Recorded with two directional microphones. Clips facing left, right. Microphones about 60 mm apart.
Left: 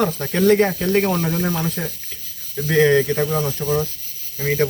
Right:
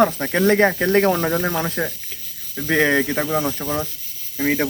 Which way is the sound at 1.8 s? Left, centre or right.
Right.